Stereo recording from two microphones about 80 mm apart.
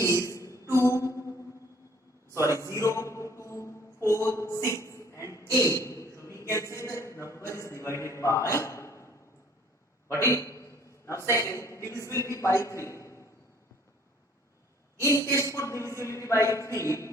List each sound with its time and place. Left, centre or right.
0.0 s a sound: left
0.6 s music: left
2.3 s a man's voice: left
10.2 s a man's voice: left
15.0 s a man's voice: left